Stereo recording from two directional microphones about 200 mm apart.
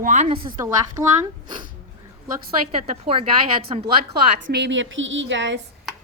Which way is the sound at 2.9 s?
30° right (ahead or behind).